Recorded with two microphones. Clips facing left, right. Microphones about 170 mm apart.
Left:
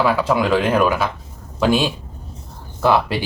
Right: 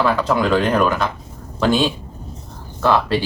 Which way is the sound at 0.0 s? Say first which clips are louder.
Even; 5° left (ahead or behind).